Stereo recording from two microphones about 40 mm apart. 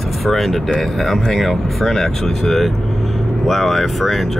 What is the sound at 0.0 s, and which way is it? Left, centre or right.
Speech, centre.